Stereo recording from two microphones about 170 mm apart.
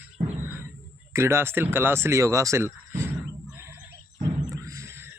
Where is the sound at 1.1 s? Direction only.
15° right (ahead or behind).